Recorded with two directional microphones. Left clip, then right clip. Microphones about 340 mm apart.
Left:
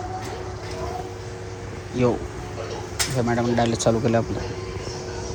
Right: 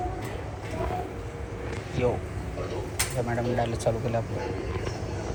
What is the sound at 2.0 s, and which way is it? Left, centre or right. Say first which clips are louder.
Speech: left 5 dB; centre.